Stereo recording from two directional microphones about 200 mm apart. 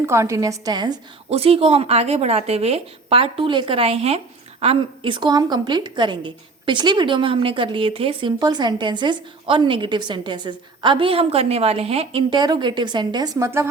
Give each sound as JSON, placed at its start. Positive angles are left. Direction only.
{"t": 0.0, "sound": "a woman's voice", "side_deg": -15}